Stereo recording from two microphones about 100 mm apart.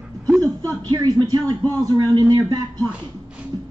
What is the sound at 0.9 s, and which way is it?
A woman's voice, 40° right (ahead or behind).